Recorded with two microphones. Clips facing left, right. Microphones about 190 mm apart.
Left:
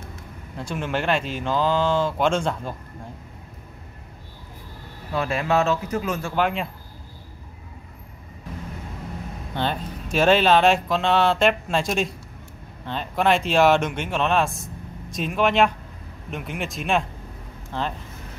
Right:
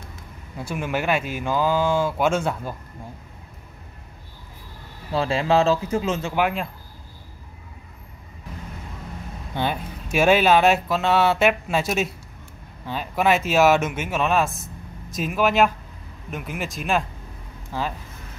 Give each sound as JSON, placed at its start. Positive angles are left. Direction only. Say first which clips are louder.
{"t": 0.1, "sound": "speech", "louder": "left 1 dB", "side_deg": -10}
{"t": 5.1, "sound": "speech", "louder": "right 2 dB", "side_deg": -30}
{"t": 6.3, "sound": "speech", "louder": "left 2 dB", "side_deg": -5}
{"t": 9.6, "sound": "speech", "louder": "right 1 dB", "side_deg": -10}